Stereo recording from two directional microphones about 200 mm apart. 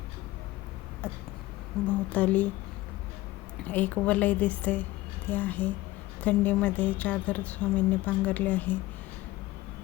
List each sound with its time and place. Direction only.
1.0 s a woman's voice: 5° left (ahead or behind)
3.7 s a woman's voice: 10° left (ahead or behind)